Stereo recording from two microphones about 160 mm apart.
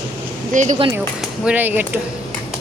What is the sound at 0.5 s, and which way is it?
Speech, 50° right (ahead or behind).